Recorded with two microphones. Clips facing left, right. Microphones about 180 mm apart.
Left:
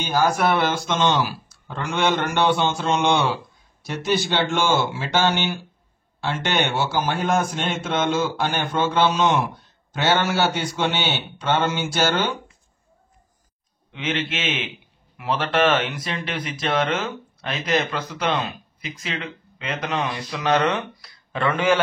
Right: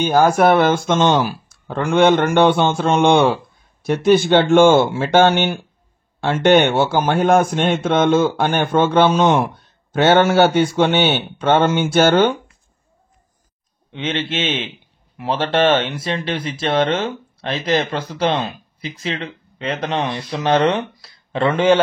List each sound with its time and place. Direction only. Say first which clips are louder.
0.0 s speech: right 7 dB; 50° right (ahead or behind)
13.9 s speech: right 4 dB; 30° right (ahead or behind)